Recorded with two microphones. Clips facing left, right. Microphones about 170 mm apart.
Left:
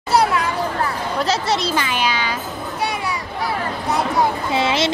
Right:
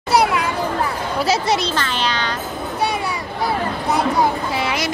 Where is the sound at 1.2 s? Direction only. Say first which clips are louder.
Right 2 dB; 10° right (ahead or behind).